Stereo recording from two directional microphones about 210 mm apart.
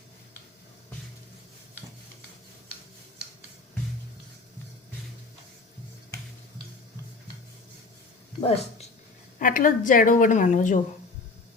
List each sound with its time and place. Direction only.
8.4 s speech: 30° left (ahead or behind)
9.4 s a woman's voice: 40° left (ahead or behind)